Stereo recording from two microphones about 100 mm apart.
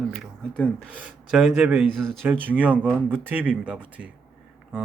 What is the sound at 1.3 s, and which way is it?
Speech, 10° right (ahead or behind).